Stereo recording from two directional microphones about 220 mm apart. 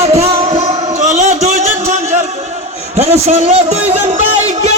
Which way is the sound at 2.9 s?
30° right (ahead or behind).